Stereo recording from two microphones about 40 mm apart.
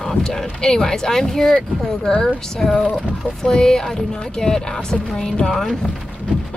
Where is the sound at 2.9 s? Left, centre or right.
Centre.